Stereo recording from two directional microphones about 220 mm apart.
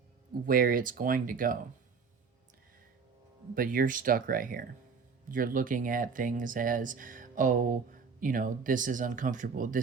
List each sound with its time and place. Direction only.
0.4 s speech: 40° right (ahead or behind)
3.5 s speech: 40° right (ahead or behind)